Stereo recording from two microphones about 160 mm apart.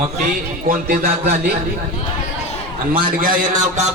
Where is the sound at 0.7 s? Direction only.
65° right (ahead or behind).